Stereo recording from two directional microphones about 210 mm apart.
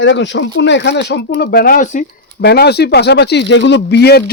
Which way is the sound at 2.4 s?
50° left (ahead or behind).